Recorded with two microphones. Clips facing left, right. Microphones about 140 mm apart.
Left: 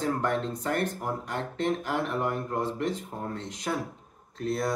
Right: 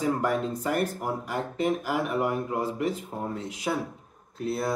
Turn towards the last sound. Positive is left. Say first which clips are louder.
# even
turn(degrees=-5)  # may be behind; listen again after turning